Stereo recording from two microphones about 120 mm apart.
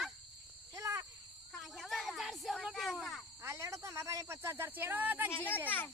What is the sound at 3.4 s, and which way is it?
Speech, 25° right (ahead or behind).